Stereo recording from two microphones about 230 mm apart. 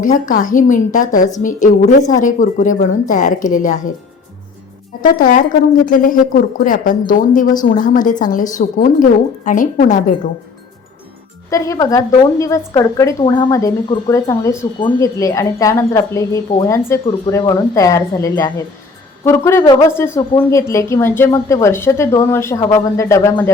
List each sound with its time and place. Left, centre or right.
0.0 s a woman's voice: left
5.0 s a woman's voice: left
11.5 s a woman's voice: centre